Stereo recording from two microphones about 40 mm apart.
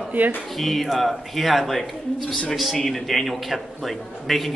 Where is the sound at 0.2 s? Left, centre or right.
Right.